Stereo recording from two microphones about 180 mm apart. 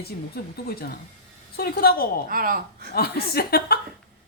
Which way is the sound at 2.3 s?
50° right (ahead or behind).